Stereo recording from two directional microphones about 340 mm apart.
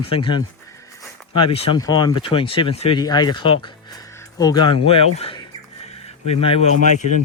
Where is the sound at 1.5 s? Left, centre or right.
Centre.